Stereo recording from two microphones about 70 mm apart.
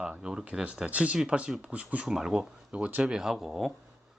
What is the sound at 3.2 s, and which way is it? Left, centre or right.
Speech, centre.